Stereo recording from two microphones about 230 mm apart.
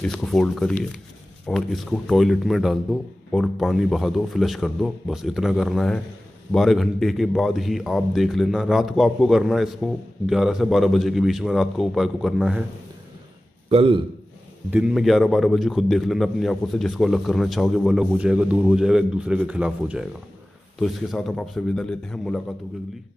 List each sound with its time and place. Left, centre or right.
0.0 s a man's voice: centre
13.7 s a man's voice: right
14.7 s a man's voice: centre